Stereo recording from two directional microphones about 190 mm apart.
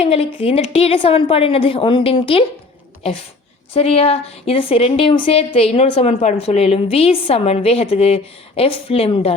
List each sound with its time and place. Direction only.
0.0 s a woman's voice: 30° left (ahead or behind)
3.8 s a woman's voice: 30° left (ahead or behind)